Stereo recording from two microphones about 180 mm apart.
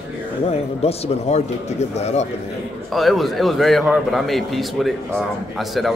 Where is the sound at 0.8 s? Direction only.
35° left (ahead or behind).